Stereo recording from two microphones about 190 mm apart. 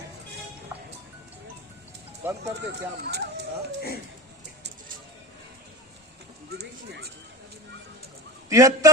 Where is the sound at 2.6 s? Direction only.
65° right (ahead or behind).